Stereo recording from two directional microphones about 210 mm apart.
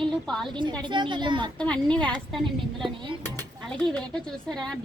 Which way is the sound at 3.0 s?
20° right (ahead or behind).